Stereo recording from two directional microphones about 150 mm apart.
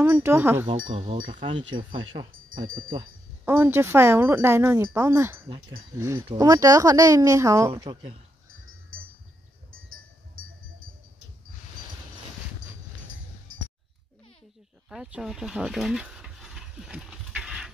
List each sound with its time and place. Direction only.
0.0 s speech: 15° right (ahead or behind)
1.1 s speech: 65° right (ahead or behind)
1.7 s speech: 35° right (ahead or behind)
2.6 s speech: 65° right (ahead or behind)
3.4 s speech: 15° right (ahead or behind)
7.7 s speech: 30° right (ahead or behind)
14.9 s a sound: 5° right (ahead or behind)